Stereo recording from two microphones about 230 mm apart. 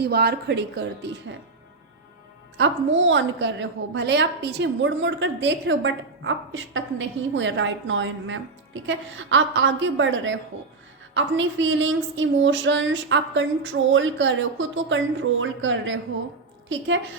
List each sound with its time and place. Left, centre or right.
0.0 s a woman's voice: right
2.6 s a woman's voice: right